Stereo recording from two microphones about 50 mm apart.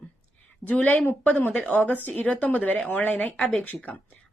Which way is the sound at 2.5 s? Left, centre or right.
Left.